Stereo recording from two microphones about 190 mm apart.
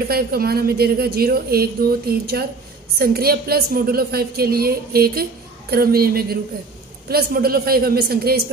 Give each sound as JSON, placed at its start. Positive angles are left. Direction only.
{"t": 0.1, "sound": "a woman's voice", "side_deg": -55}